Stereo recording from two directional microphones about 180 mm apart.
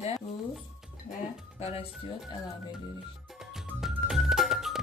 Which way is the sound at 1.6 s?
35° left (ahead or behind).